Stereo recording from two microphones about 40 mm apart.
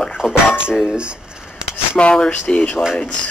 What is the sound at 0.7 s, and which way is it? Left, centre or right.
Speech, right.